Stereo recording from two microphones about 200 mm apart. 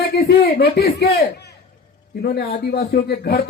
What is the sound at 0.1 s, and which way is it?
A man's voice, 55° left (ahead or behind).